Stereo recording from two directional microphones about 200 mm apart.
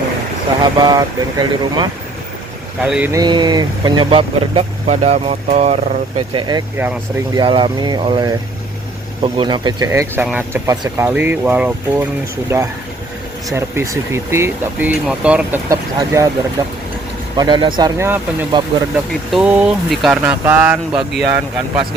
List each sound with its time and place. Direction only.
0.6 s speech: 20° right (ahead or behind)
2.8 s speech: 5° right (ahead or behind)
3.1 s speech: 20° right (ahead or behind)
17.3 s speech: 20° right (ahead or behind)